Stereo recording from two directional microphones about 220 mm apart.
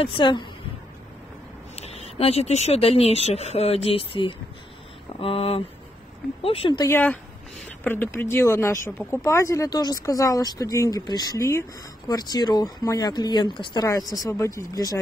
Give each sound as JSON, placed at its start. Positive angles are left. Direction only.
{"t": 0.0, "sound": "a woman's voice", "side_deg": 20}
{"t": 1.8, "sound": "a woman's voice", "side_deg": 30}